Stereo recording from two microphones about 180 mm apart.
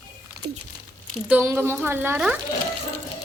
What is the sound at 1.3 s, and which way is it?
Speech, 10° right (ahead or behind).